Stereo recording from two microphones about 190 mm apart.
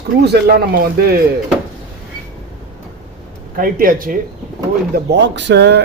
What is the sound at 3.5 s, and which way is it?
Speech, 50° right (ahead or behind).